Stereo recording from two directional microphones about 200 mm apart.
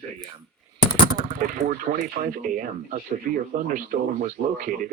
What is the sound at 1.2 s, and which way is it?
Speech, 40° right (ahead or behind).